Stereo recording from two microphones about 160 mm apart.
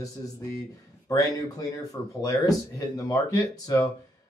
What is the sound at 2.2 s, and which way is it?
Speech, 20° left (ahead or behind).